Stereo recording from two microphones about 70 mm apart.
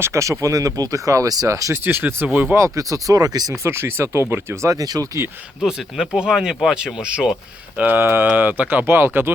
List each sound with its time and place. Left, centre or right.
0.0 s speech: right
1.7 s speech: right
2.6 s speech: right
3.6 s speech: right
4.7 s speech: right
6.1 s speech: centre
7.8 s speech: right